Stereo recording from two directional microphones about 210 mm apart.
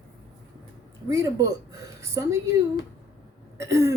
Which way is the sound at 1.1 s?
15° right (ahead or behind).